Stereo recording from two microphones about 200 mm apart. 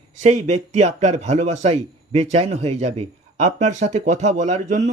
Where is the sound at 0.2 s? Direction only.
35° right (ahead or behind).